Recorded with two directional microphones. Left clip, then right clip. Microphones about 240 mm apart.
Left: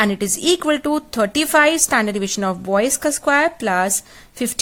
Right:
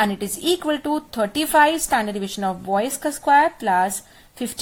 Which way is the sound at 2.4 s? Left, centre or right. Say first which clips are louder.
Left 3 dB; left.